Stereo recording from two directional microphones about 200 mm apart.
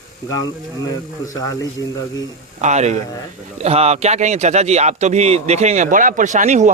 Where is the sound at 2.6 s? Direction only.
35° right (ahead or behind).